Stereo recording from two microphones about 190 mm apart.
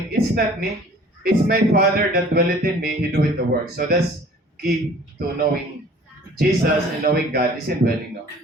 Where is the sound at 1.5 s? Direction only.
55° right (ahead or behind).